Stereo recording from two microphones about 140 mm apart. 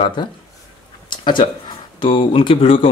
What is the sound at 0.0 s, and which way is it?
Speech, 35° left (ahead or behind).